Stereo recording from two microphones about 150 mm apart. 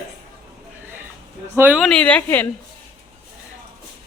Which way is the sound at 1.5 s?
10° right (ahead or behind).